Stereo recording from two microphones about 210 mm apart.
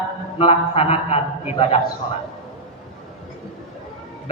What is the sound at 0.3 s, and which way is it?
A man's voice, 25° left (ahead or behind).